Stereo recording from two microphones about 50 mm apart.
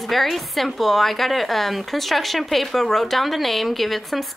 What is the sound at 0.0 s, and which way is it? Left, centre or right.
Speech, centre.